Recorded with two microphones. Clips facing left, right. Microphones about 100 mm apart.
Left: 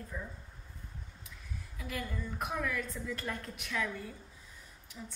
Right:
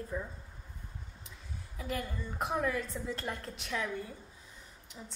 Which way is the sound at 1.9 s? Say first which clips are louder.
Right 2 dB; 30° right (ahead or behind).